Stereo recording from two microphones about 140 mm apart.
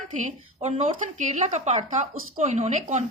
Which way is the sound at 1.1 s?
60° right (ahead or behind).